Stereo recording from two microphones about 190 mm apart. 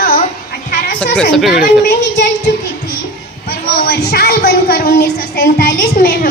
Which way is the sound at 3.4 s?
55° left (ahead or behind).